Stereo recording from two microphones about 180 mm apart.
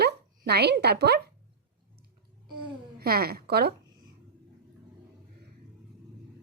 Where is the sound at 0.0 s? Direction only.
65° right (ahead or behind).